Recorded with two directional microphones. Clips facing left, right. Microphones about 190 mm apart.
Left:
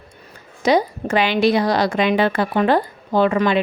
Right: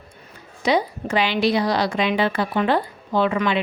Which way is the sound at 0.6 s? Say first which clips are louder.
Left 4 dB; 45° left (ahead or behind).